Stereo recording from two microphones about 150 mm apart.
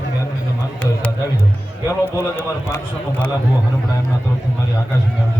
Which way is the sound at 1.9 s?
15° left (ahead or behind).